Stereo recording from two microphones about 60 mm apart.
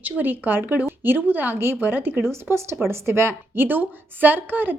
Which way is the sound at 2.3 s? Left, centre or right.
Right.